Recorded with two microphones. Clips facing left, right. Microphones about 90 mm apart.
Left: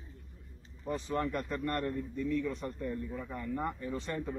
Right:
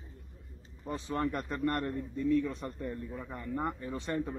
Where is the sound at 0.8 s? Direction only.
25° right (ahead or behind).